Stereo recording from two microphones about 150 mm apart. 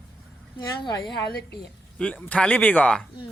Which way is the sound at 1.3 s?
90° left.